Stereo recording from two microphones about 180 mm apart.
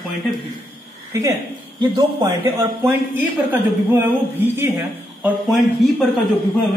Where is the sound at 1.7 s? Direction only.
25° right (ahead or behind).